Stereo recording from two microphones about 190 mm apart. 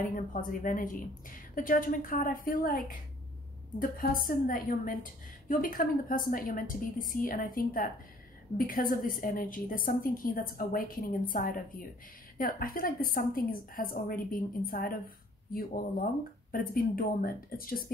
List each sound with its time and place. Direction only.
0.0 s a woman's voice: 45° left (ahead or behind)
3.8 s a woman's voice: 50° left (ahead or behind)